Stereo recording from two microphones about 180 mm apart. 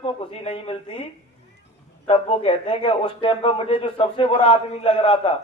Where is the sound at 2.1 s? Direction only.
30° left (ahead or behind).